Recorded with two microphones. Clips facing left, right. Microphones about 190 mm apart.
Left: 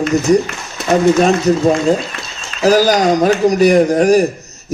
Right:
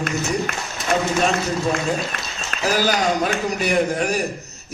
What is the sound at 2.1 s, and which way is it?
Applause, 55° right (ahead or behind).